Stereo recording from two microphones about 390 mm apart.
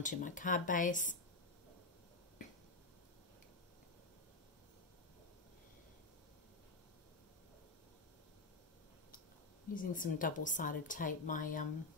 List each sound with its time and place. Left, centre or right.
0.0 s speech: centre
9.8 s speech: left